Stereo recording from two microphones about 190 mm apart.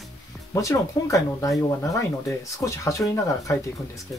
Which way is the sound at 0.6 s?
15° left (ahead or behind).